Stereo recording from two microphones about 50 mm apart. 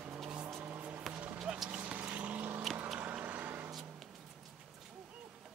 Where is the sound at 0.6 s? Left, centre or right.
Right.